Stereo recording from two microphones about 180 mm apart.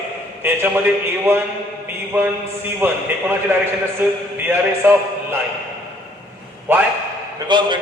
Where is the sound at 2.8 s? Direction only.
10° right (ahead or behind).